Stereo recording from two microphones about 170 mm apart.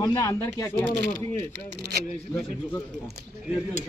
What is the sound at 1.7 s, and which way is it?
Speech, 75° right (ahead or behind).